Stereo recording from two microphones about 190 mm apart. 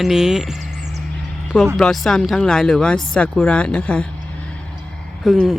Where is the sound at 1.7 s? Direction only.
Centre (ahead or behind).